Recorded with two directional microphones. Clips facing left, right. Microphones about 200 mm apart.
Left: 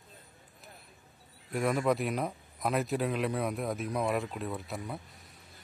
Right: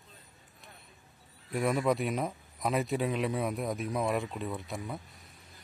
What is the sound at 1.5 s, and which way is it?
Speech, centre (ahead or behind).